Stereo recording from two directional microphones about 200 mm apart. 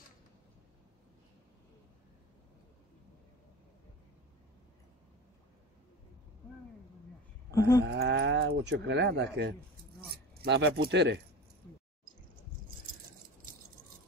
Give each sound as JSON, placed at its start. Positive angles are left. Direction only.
{"t": 7.5, "sound": "livestock", "side_deg": 15}
{"t": 7.8, "sound": "speech", "side_deg": -60}